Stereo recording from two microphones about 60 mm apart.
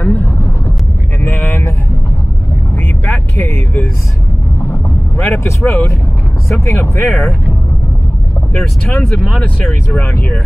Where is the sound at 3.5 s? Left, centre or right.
Left.